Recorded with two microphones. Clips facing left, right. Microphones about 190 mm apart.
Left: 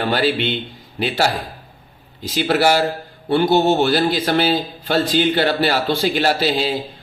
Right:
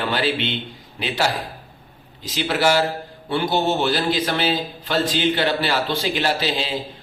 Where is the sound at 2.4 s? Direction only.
40° left (ahead or behind).